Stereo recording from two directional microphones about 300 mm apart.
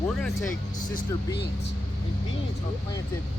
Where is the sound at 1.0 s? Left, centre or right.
Left.